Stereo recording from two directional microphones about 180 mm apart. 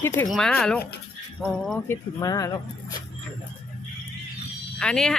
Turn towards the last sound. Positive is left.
turn(degrees=5)  # may be behind; listen again after turning